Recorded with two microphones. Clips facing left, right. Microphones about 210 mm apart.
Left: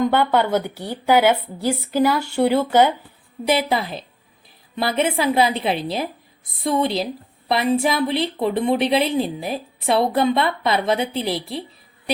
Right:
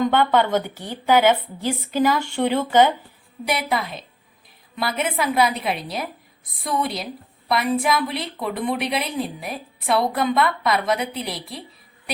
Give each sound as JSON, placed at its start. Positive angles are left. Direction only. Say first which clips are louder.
{"t": 0.0, "sound": "a woman's voice", "louder": "even", "side_deg": 10}
{"t": 3.4, "sound": "a woman's voice", "louder": "left 4 dB", "side_deg": 25}